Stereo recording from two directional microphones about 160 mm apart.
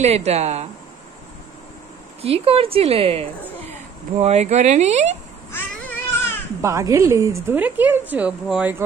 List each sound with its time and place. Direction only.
0.0 s speech: 40° right (ahead or behind)
2.2 s a woman's voice: 35° right (ahead or behind)
5.5 s babbling: 15° left (ahead or behind)
6.6 s a woman's voice: 20° right (ahead or behind)